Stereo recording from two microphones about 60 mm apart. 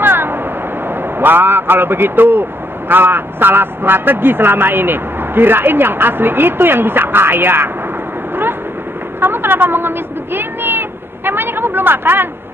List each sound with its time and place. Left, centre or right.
0.0 s a sound: right
1.2 s a man's voice: right
9.2 s speech: right